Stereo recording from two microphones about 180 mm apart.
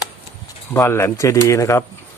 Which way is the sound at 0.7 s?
15° left (ahead or behind).